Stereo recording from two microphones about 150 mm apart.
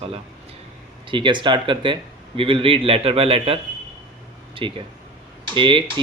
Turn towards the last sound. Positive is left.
turn(degrees=-35)  # may be behind; listen again after turning